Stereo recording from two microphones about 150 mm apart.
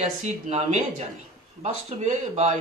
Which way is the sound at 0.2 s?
50° right (ahead or behind).